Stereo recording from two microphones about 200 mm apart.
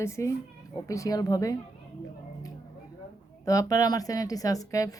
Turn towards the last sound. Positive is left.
turn(degrees=15)  # may be behind; listen again after turning